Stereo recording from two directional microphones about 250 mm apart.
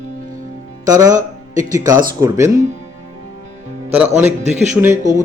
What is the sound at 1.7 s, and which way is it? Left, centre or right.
Speech, centre.